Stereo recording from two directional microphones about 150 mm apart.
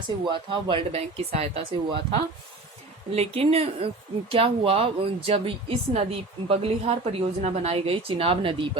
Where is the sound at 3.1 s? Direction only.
45° right (ahead or behind).